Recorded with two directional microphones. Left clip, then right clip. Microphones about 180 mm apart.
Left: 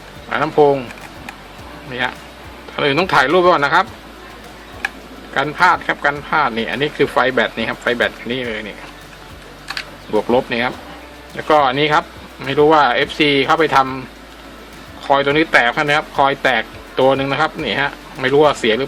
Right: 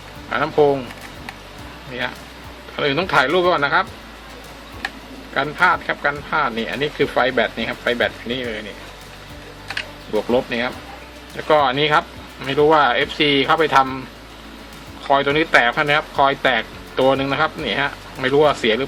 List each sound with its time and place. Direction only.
0.3 s speech: 10° left (ahead or behind)
2.7 s speech: 15° left (ahead or behind)
5.3 s speech: 15° left (ahead or behind)
10.2 s speech: 15° left (ahead or behind)
15.0 s speech: 5° left (ahead or behind)